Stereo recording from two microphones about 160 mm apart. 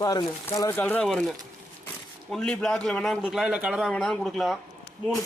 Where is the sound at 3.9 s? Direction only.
5° left (ahead or behind).